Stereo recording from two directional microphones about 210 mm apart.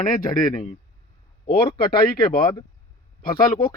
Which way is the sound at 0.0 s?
40° left (ahead or behind).